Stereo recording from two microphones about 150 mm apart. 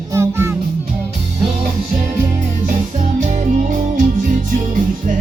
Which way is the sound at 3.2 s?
55° right (ahead or behind).